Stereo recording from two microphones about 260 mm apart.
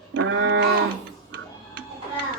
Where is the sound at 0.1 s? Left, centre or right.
Right.